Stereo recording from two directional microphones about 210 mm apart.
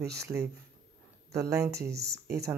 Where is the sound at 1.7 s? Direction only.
50° right (ahead or behind).